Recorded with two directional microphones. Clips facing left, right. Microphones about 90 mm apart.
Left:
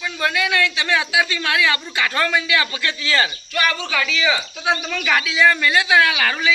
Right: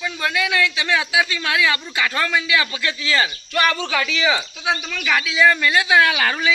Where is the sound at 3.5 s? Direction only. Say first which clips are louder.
Right 3 dB; 35° right (ahead or behind).